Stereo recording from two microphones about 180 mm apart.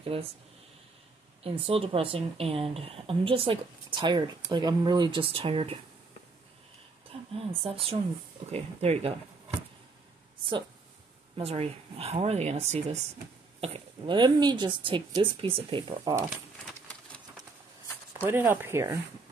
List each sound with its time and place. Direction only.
0.1 s speech: 30° right (ahead or behind)
1.4 s speech: 35° right (ahead or behind)
7.3 s speech: 30° right (ahead or behind)
11.3 s speech: 35° right (ahead or behind)
18.2 s speech: 10° right (ahead or behind)